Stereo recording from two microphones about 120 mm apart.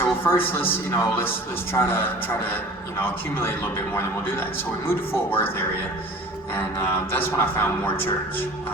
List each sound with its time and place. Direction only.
0.0 s a man's voice: 20° left (ahead or behind)